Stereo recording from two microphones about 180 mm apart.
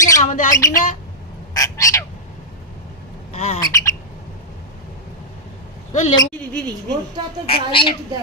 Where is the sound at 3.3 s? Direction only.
40° left (ahead or behind).